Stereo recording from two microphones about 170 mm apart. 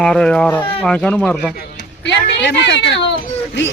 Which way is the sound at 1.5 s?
85° left.